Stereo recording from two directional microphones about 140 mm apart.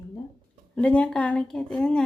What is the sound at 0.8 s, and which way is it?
Speech, 10° left (ahead or behind).